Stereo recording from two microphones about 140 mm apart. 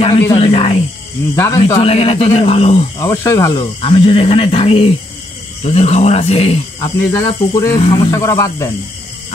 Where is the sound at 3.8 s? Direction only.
40° left (ahead or behind).